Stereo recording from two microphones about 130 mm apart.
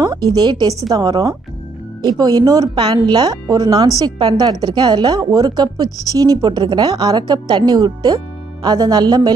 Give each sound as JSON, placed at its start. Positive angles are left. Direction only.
{"t": 0.0, "sound": "a woman's voice", "side_deg": -30}